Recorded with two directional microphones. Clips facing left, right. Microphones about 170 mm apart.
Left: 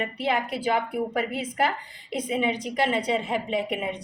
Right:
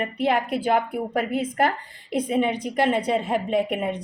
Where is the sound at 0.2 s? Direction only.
55° right (ahead or behind).